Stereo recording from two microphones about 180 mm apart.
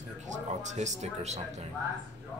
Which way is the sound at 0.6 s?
40° right (ahead or behind).